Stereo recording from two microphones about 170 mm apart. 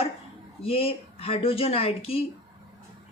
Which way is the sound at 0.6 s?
35° left (ahead or behind).